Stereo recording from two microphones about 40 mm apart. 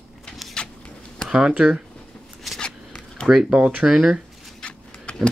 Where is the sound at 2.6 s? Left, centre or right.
Left.